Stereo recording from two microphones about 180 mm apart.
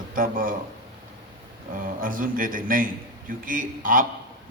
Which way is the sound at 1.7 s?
50° right (ahead or behind).